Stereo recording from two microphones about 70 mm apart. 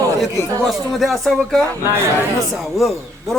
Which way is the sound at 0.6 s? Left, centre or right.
Centre.